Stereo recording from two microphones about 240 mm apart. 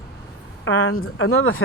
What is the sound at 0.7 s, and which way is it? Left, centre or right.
Speech, left.